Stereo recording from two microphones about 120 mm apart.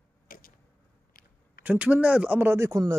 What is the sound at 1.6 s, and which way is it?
Speech, 15° right (ahead or behind).